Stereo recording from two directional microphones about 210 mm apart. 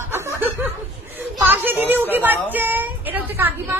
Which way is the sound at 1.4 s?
10° right (ahead or behind).